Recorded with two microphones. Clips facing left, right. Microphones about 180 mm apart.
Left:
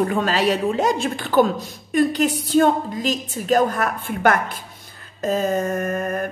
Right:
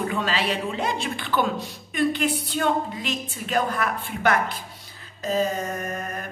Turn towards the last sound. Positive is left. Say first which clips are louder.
# left 8 dB
turn(degrees=50)  # may be behind; listen again after turning